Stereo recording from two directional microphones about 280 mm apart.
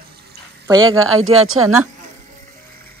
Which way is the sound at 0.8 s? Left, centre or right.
Right.